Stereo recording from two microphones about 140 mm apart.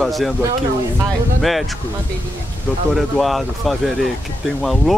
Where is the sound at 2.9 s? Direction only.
Centre (ahead or behind).